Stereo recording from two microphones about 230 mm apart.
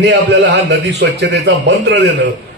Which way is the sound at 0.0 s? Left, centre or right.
Right.